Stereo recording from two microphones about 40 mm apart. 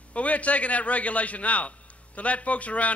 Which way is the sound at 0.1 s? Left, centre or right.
Left.